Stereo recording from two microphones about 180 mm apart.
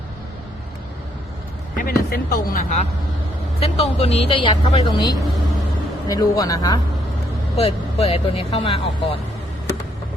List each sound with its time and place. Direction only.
1.7 s speech: 55° left (ahead or behind); by 6.7 s 20° left (ahead or behind)
7.5 s speech: 35° left (ahead or behind)